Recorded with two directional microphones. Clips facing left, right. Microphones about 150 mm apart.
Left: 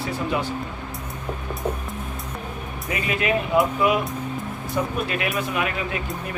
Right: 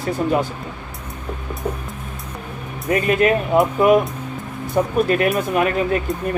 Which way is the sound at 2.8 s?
45° right (ahead or behind).